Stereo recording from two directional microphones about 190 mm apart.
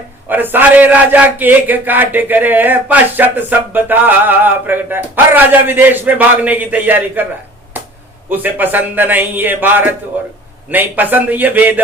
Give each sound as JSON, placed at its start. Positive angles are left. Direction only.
{"t": 0.3, "sound": "a man's voice", "side_deg": -10}
{"t": 8.3, "sound": "a man's voice", "side_deg": -10}